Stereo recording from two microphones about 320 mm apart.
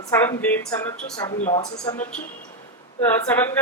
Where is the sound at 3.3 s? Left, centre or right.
Centre.